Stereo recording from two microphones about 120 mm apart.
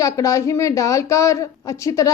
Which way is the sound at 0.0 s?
25° left (ahead or behind).